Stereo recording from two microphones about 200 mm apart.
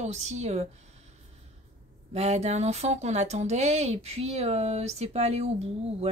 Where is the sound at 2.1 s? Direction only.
35° right (ahead or behind).